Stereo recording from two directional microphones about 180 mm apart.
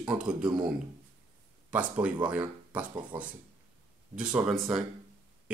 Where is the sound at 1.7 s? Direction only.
10° right (ahead or behind).